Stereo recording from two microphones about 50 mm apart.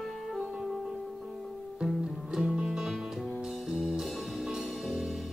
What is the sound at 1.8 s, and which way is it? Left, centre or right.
Music, centre.